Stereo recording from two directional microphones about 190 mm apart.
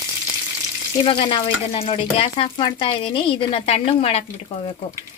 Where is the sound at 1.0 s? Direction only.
25° left (ahead or behind).